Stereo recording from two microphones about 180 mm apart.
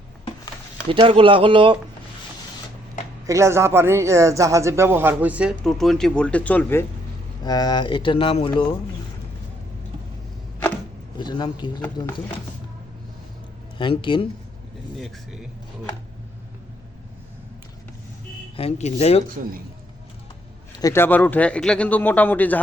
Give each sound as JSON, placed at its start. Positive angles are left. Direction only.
{"t": 0.9, "sound": "speech", "side_deg": -30}
{"t": 3.2, "sound": "speech", "side_deg": -15}
{"t": 7.4, "sound": "speech", "side_deg": 20}
{"t": 11.2, "sound": "speech", "side_deg": 25}
{"t": 13.7, "sound": "speech", "side_deg": 25}
{"t": 14.9, "sound": "speech", "side_deg": 0}
{"t": 18.5, "sound": "speech", "side_deg": 35}
{"t": 20.7, "sound": "a man's voice", "side_deg": 15}